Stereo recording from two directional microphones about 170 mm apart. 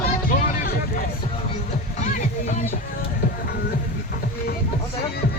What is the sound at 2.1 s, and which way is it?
Music, 50° left (ahead or behind).